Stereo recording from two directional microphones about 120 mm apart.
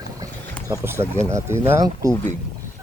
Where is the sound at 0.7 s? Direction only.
20° right (ahead or behind).